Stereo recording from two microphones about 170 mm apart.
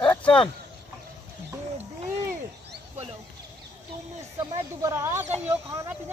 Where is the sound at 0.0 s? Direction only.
10° left (ahead or behind).